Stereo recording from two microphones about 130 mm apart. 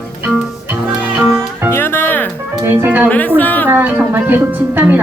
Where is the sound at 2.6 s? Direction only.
20° right (ahead or behind).